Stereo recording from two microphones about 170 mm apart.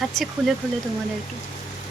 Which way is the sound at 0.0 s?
Centre (ahead or behind).